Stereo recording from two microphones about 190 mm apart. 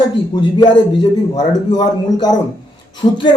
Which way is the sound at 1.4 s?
20° left (ahead or behind).